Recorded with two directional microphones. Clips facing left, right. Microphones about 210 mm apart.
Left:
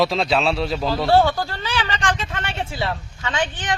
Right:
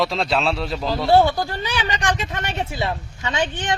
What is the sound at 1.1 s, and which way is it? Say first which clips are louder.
Speech: right 2 dB; 20° right (ahead or behind).